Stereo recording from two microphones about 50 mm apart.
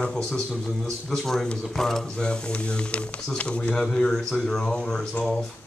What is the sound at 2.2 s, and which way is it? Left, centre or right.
Speech, centre.